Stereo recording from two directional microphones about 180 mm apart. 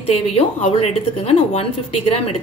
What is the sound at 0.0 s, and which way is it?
A woman's voice, 35° left (ahead or behind).